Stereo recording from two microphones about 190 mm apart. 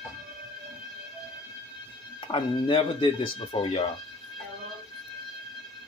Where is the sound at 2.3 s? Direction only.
25° left (ahead or behind).